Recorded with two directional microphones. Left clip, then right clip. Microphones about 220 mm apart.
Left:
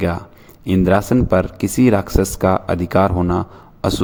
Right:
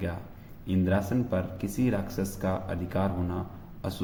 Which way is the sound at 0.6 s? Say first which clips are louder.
Left 13 dB; 45° left (ahead or behind).